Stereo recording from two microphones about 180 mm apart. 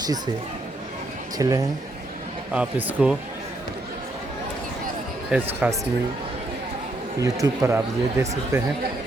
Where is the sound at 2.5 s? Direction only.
5° right (ahead or behind).